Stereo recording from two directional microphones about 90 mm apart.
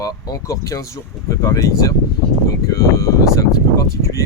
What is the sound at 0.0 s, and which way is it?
Speech, 40° left (ahead or behind).